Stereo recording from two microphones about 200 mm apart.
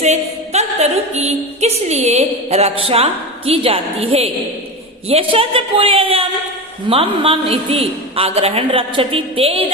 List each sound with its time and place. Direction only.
0.0 s a woman's voice: 35° right (ahead or behind)